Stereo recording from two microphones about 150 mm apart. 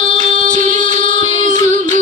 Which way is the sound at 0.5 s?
55° right (ahead or behind).